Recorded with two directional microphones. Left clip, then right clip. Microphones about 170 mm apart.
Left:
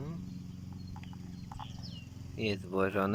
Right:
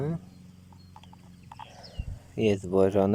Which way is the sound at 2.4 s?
40° right (ahead or behind).